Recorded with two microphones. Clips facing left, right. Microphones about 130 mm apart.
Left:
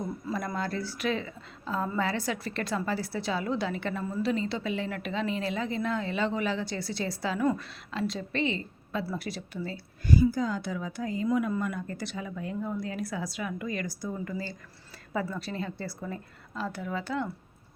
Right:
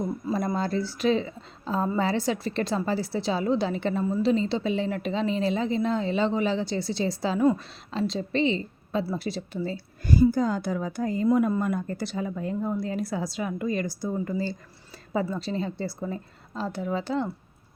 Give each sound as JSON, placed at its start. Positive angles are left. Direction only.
{"t": 0.3, "sound": "a woman's voice", "side_deg": -30}